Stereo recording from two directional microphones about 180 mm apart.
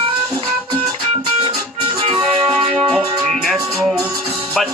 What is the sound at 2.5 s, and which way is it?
Music, 30° right (ahead or behind).